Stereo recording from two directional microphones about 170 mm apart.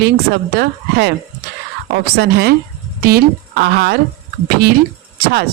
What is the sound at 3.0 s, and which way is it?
Speech, 60° right (ahead or behind).